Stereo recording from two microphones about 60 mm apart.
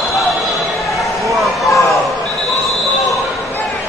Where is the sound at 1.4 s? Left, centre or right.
Centre.